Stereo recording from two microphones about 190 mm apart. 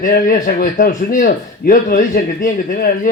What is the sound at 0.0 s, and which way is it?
Speech, 45° left (ahead or behind).